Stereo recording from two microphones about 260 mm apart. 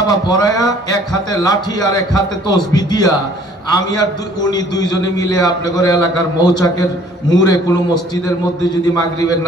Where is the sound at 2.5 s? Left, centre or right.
Centre.